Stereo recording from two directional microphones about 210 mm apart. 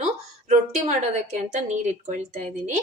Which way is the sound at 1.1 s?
35° right (ahead or behind).